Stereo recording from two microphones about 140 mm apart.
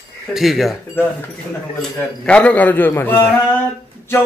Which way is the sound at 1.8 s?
10° left (ahead or behind).